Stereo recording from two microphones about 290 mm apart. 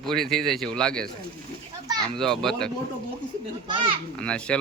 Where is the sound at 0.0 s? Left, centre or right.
Centre.